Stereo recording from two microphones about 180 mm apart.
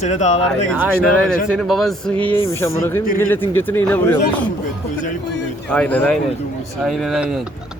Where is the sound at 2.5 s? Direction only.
15° left (ahead or behind).